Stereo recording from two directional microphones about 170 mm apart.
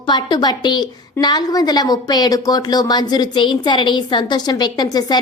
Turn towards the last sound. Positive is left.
turn(degrees=25)  # may be behind; listen again after turning